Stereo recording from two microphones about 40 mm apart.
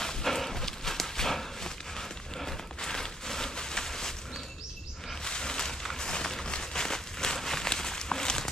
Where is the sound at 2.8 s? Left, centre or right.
Centre.